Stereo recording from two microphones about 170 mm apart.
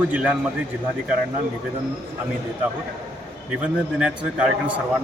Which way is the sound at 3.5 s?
5° right (ahead or behind).